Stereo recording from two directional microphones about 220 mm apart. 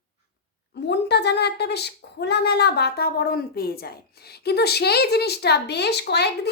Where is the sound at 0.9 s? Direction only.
50° left (ahead or behind).